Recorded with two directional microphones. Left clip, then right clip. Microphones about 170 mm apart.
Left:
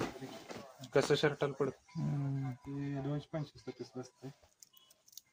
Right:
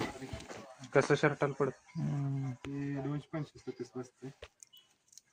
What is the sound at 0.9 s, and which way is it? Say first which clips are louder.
Speech: right 2 dB; 40° right (ahead or behind).